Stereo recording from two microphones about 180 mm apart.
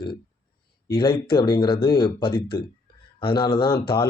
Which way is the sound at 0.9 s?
25° left (ahead or behind).